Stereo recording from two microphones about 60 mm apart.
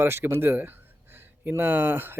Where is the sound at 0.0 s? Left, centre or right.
Right.